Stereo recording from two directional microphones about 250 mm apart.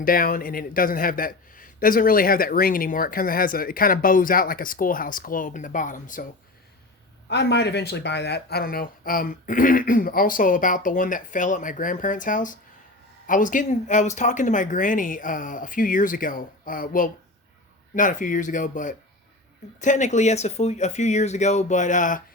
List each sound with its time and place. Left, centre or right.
0.0 s a man's voice: left
7.3 s a man's voice: left